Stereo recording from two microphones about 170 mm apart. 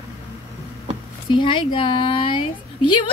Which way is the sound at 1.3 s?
30° left (ahead or behind).